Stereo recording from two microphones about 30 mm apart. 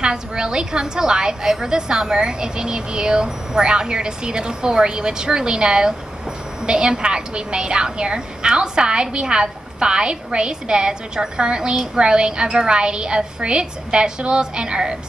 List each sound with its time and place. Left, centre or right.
0.0 s a woman's voice: right